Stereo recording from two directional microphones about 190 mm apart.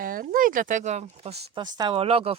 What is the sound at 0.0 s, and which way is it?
Speech, 50° right (ahead or behind).